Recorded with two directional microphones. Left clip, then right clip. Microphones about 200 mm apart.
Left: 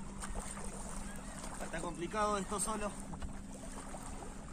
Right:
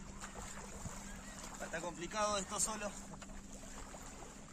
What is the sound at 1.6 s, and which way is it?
Speech, 25° right (ahead or behind).